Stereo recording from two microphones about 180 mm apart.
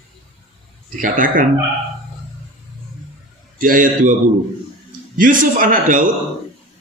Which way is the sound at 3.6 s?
50° right (ahead or behind).